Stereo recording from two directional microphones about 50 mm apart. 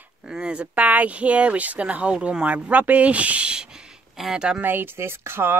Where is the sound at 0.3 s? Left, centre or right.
Right.